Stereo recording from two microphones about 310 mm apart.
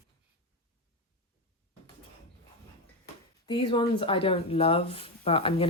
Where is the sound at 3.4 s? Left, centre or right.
Centre.